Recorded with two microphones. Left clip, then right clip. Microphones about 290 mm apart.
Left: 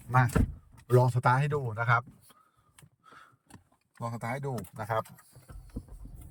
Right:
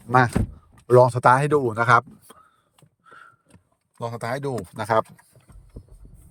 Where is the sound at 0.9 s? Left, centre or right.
Centre.